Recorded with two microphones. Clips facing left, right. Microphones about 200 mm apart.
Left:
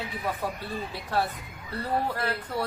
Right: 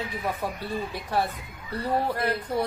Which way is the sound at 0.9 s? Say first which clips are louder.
Left 1 dB; 15° right (ahead or behind).